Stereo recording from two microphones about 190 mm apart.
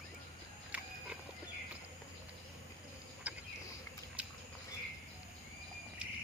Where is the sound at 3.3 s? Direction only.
5° right (ahead or behind).